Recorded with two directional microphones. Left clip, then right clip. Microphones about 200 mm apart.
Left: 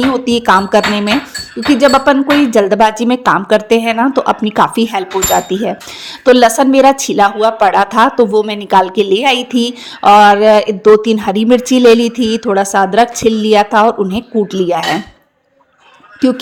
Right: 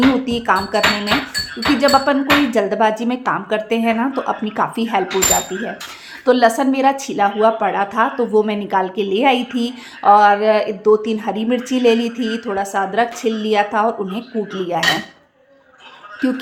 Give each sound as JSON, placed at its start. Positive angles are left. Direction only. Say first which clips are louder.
{"t": 0.3, "sound": "a woman's voice", "louder": "left 8 dB", "side_deg": 35}